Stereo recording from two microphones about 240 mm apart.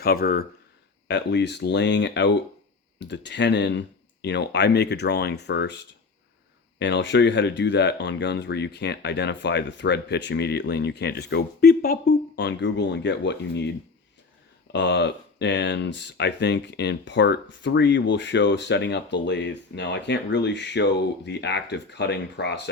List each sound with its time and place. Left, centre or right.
0.0 s speech: left
6.7 s speech: left
14.7 s speech: left